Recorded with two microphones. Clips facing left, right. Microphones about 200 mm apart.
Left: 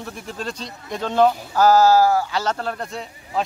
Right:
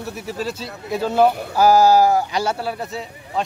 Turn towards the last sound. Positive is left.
turn(degrees=-5)  # may be behind; listen again after turning